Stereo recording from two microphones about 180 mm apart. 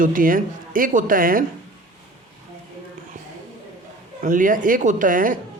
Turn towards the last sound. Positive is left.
turn(degrees=-50)  # may be behind; listen again after turning